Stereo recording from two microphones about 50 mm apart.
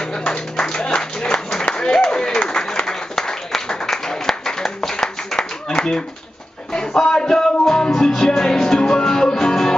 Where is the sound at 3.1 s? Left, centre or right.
Centre.